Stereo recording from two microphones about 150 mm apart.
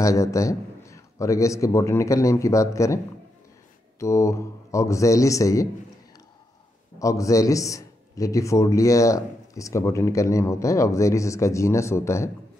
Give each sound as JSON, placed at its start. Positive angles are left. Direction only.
{"t": 0.0, "sound": "a man's voice", "side_deg": 20}
{"t": 4.0, "sound": "a man's voice", "side_deg": 20}
{"t": 7.0, "sound": "a man's voice", "side_deg": 20}